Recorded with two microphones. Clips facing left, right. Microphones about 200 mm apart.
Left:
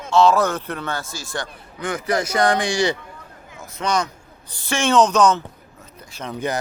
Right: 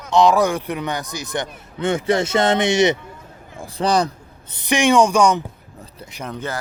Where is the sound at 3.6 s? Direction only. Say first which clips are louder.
Right 4 dB; 35° right (ahead or behind).